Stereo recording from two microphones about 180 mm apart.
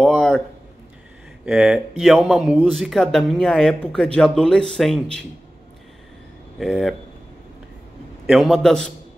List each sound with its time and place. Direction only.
0.0 s a sound: 5° left (ahead or behind)
1.4 s speech: 5° right (ahead or behind)
6.6 s speech: centre (ahead or behind)
8.3 s speech: centre (ahead or behind)